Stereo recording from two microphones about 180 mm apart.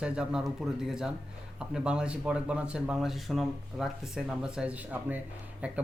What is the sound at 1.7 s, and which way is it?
A man's voice, 5° right (ahead or behind).